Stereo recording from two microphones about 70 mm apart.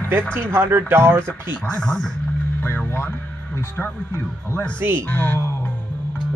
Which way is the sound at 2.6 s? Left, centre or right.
Left.